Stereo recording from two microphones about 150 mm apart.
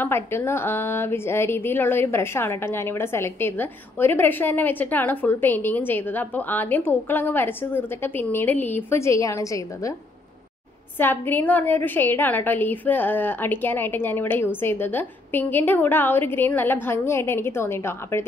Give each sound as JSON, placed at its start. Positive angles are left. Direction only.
{"t": 0.0, "sound": "a woman's voice", "side_deg": 15}
{"t": 11.0, "sound": "a woman's voice", "side_deg": 15}